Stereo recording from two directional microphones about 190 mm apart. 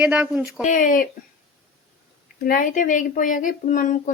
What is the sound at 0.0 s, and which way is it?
Speech, 5° right (ahead or behind).